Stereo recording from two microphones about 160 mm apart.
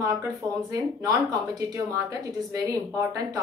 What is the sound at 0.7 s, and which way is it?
Speech, 20° right (ahead or behind).